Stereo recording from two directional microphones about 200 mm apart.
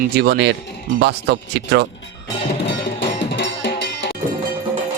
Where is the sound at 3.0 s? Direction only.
60° left (ahead or behind).